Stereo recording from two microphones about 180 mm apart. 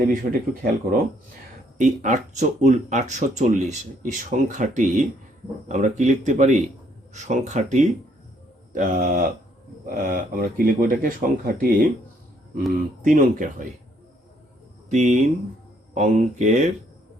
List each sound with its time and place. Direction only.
0.1 s speech: 50° right (ahead or behind)
14.8 s speech: 40° right (ahead or behind)